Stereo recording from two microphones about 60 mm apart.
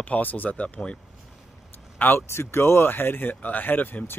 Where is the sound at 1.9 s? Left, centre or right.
Left.